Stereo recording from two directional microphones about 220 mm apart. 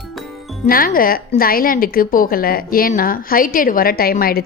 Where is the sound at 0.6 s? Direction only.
40° left (ahead or behind).